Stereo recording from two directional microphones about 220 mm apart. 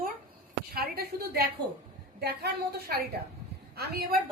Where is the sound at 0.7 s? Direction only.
45° right (ahead or behind).